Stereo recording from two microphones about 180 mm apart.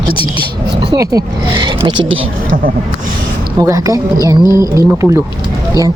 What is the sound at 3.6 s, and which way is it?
Speech, 20° right (ahead or behind).